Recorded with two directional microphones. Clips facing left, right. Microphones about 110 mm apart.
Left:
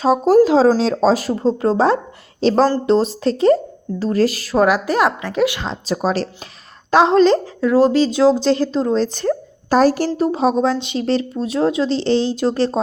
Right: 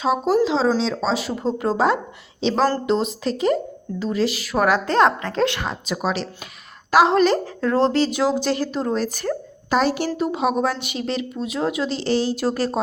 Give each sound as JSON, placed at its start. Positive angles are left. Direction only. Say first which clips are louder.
{"t": 0.0, "sound": "speech", "louder": "left 6 dB", "side_deg": 40}
{"t": 1.5, "sound": "speech", "louder": "left 2 dB", "side_deg": 30}
{"t": 2.4, "sound": "a woman's voice", "louder": "left 6 dB", "side_deg": 40}
{"t": 3.0, "sound": "speech", "louder": "left 6 dB", "side_deg": 30}
{"t": 4.0, "sound": "speech", "louder": "left 5 dB", "side_deg": 40}
{"t": 4.5, "sound": "a woman's voice", "louder": "left 2 dB", "side_deg": 20}
{"t": 5.6, "sound": "speech", "louder": "left 4 dB", "side_deg": 30}
{"t": 6.9, "sound": "speech", "louder": "left 4 dB", "side_deg": 25}
{"t": 7.6, "sound": "a woman's voice", "louder": "left 5 dB", "side_deg": 10}
{"t": 8.1, "sound": "speech", "louder": "left 7 dB", "side_deg": -10}
{"t": 8.8, "sound": "speech", "louder": "left 5 dB", "side_deg": 25}
{"t": 9.6, "sound": "a woman's voice", "louder": "left 6 dB", "side_deg": 40}